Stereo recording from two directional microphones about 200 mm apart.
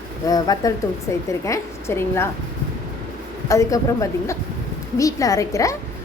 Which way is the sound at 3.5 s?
15° left (ahead or behind).